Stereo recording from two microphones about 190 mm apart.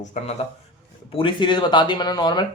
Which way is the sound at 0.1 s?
35° left (ahead or behind).